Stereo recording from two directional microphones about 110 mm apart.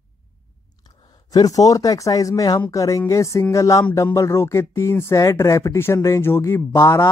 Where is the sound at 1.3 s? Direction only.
35° left (ahead or behind).